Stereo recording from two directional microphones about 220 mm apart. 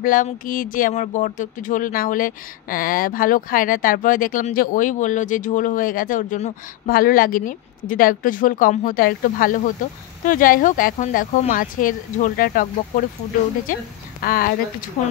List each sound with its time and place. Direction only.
0.0 s speech: 40° left (ahead or behind)